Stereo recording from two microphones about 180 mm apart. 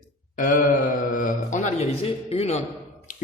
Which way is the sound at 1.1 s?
45° left (ahead or behind).